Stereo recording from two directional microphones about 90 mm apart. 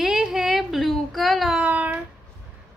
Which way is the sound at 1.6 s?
15° right (ahead or behind).